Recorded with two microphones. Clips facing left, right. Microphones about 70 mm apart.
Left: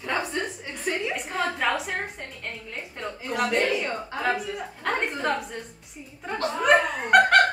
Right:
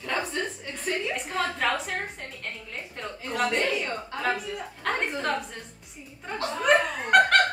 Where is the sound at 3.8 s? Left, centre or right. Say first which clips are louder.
Left 2 dB; left.